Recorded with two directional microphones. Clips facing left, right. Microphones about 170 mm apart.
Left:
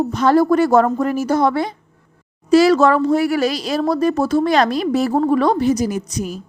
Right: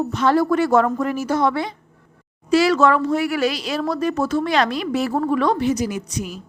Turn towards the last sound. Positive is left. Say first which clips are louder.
# left 4 dB
turn(degrees=40)  # may be behind; listen again after turning